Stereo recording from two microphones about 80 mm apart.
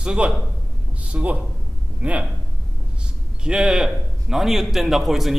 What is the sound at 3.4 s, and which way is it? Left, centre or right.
A man's voice, centre.